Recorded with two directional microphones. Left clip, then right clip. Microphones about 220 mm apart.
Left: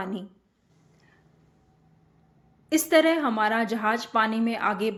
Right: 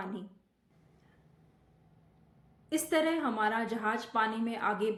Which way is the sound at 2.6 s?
35° left (ahead or behind).